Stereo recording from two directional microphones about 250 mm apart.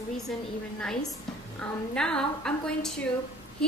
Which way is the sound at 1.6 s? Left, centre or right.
Centre.